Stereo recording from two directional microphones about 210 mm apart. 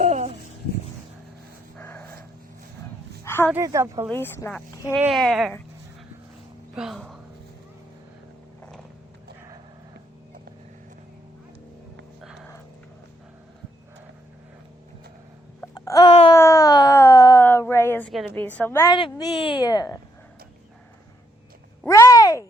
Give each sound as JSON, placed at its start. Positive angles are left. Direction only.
{"t": 0.0, "sound": "babbling", "side_deg": -30}
{"t": 1.8, "sound": "dog", "side_deg": 10}
{"t": 3.2, "sound": "a sound", "side_deg": 10}
{"t": 3.5, "sound": "speech", "side_deg": -15}
{"t": 4.1, "sound": "speech", "side_deg": 10}
{"t": 4.9, "sound": "speech", "side_deg": 0}
{"t": 6.7, "sound": "speech", "side_deg": 0}
{"t": 12.2, "sound": "a sound", "side_deg": 0}
{"t": 15.6, "sound": "babbling", "side_deg": 15}
{"t": 16.3, "sound": "a sound", "side_deg": 15}
{"t": 18.3, "sound": "a woman's voice", "side_deg": 10}
{"t": 21.8, "sound": "a sound", "side_deg": 15}